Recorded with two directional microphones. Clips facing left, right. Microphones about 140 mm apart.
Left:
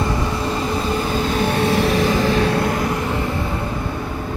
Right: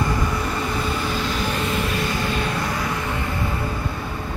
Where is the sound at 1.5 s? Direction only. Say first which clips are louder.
Left 7 dB; 80° left.